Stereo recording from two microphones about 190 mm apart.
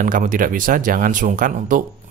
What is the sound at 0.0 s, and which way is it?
Speech, 45° right (ahead or behind).